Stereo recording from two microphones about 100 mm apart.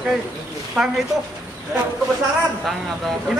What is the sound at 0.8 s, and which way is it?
Speech, 5° right (ahead or behind).